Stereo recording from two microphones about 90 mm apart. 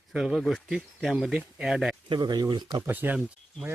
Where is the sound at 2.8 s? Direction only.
20° right (ahead or behind).